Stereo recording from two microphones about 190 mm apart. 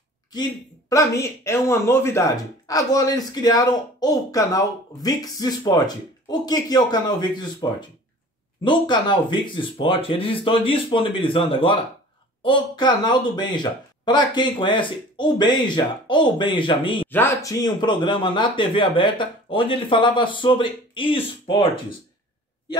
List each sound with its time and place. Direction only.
0.3 s speech: 20° left (ahead or behind)
8.6 s speech: 25° left (ahead or behind)
17.1 s speech: 15° left (ahead or behind)